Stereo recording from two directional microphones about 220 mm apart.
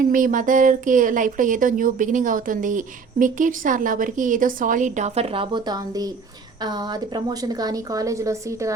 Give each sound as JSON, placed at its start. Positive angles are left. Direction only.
{"t": 0.1, "sound": "a woman's voice", "side_deg": -35}